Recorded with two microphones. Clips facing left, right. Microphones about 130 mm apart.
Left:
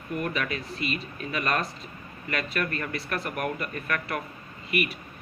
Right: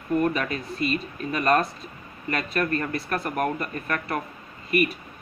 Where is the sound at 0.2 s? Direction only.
35° right (ahead or behind).